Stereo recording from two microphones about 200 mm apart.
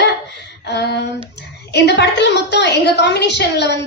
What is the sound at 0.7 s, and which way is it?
A woman's voice, 55° left (ahead or behind).